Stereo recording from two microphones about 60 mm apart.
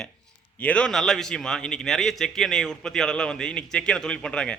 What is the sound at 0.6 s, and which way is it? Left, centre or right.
Speech, left.